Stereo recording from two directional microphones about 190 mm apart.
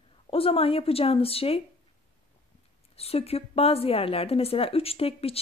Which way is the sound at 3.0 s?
30° left (ahead or behind).